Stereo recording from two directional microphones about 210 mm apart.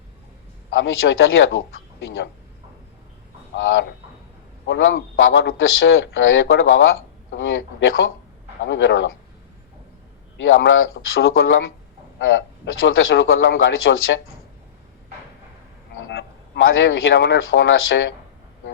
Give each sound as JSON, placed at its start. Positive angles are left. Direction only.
{"t": 0.7, "sound": "a man's voice", "side_deg": 65}
{"t": 3.5, "sound": "a man's voice", "side_deg": 65}
{"t": 10.3, "sound": "a man's voice", "side_deg": 65}
{"t": 16.0, "sound": "a man's voice", "side_deg": 60}